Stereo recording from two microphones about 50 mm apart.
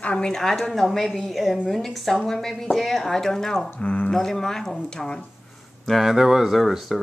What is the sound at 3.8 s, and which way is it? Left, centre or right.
Speech, left.